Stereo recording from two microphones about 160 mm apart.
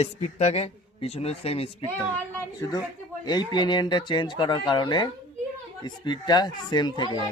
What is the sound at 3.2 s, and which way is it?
Speech, 25° left (ahead or behind).